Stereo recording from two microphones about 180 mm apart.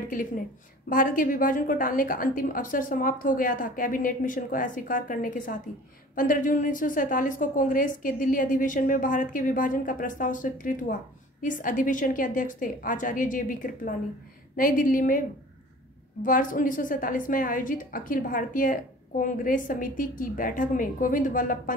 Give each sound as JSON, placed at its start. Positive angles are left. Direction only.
{"t": 0.1, "sound": "a woman's voice", "side_deg": 50}